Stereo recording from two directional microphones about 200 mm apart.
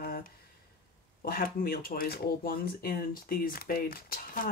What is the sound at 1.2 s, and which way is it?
Speech, 45° left (ahead or behind).